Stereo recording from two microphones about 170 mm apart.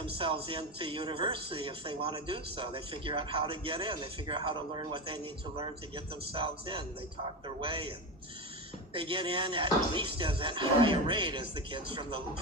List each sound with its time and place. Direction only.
0.0 s a man's voice: 30° right (ahead or behind)